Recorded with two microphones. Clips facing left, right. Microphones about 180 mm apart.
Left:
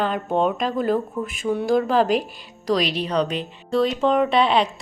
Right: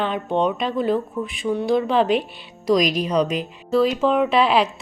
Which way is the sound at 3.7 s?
5° right (ahead or behind).